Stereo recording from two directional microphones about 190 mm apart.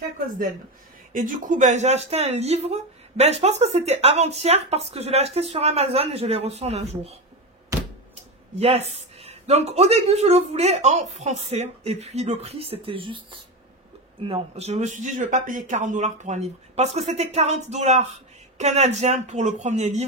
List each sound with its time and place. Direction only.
1.1 s speech: 45° right (ahead or behind)
7.7 s a sound: 15° right (ahead or behind)
8.5 s speech: 35° right (ahead or behind)